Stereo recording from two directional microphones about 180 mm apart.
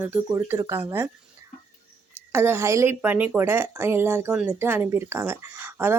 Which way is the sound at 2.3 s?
15° right (ahead or behind).